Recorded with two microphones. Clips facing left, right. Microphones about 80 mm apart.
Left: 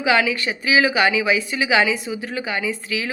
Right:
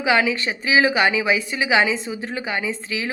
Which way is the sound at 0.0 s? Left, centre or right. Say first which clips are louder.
Even; right.